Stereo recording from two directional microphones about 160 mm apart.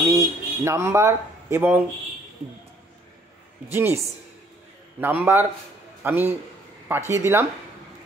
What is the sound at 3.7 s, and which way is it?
Speech, 15° right (ahead or behind).